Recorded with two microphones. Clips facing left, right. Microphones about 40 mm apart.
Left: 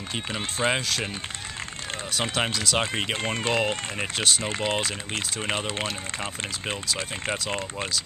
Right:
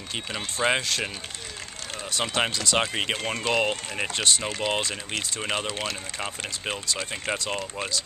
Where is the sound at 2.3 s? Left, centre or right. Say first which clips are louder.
Right 2 dB; centre.